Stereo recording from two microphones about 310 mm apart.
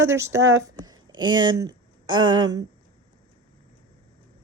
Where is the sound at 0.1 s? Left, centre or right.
Centre.